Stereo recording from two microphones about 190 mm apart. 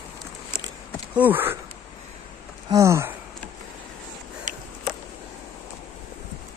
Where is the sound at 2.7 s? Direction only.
15° right (ahead or behind).